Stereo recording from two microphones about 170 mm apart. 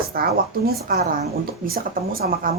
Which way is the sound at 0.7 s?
65° right (ahead or behind).